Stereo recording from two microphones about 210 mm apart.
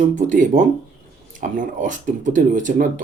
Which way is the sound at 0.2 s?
35° right (ahead or behind).